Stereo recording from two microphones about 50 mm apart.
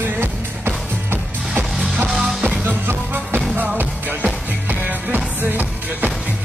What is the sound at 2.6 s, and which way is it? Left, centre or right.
Music, right.